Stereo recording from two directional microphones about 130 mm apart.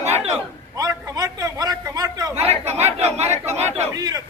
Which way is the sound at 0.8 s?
30° right (ahead or behind).